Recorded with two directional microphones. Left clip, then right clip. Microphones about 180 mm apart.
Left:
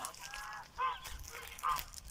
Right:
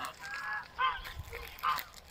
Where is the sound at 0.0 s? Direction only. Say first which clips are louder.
Right 6 dB; centre (ahead or behind).